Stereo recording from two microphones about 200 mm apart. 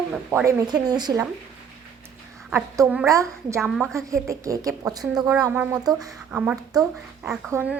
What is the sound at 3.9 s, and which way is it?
Speech, 15° right (ahead or behind).